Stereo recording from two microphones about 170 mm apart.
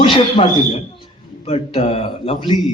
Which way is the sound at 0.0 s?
30° left (ahead or behind).